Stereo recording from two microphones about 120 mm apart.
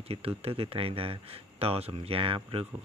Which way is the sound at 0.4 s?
50° right (ahead or behind).